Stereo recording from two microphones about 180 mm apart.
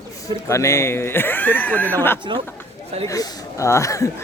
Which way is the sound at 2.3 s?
25° right (ahead or behind).